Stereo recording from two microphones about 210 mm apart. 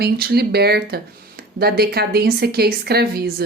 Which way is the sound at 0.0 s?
50° right (ahead or behind).